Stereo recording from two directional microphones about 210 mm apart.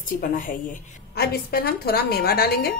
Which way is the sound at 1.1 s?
45° left (ahead or behind).